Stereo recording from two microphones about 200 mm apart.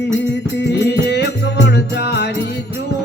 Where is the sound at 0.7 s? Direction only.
55° left (ahead or behind).